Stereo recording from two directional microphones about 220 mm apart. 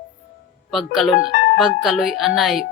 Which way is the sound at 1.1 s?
45° left (ahead or behind).